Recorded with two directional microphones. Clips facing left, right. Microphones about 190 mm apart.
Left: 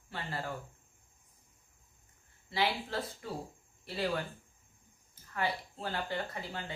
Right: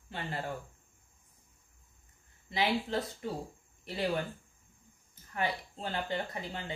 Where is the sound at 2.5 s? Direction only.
20° right (ahead or behind).